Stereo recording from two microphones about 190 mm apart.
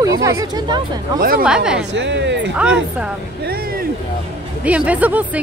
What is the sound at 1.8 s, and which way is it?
Speech, 70° right (ahead or behind).